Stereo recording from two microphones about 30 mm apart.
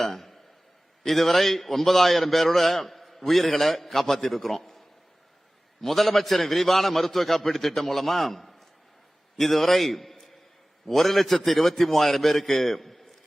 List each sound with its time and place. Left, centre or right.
0.0 s a man's voice: centre
5.8 s a man's voice: centre